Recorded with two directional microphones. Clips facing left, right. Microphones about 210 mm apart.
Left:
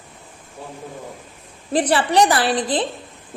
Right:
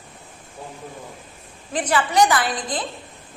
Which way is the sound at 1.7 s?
35° left (ahead or behind).